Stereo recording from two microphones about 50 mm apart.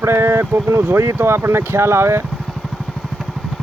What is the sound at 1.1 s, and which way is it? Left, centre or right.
Speech, right.